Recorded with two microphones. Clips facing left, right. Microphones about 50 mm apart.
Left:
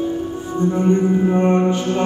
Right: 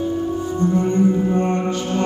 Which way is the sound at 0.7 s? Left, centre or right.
Left.